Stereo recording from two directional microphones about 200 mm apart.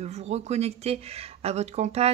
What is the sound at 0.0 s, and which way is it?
Speech, 35° right (ahead or behind).